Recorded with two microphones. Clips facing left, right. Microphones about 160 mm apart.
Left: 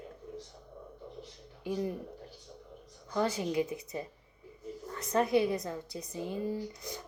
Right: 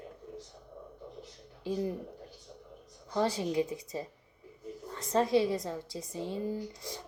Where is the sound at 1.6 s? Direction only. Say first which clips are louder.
Right 1 dB; 30° right (ahead or behind).